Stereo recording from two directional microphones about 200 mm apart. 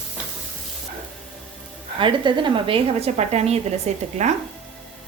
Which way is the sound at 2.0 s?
25° right (ahead or behind).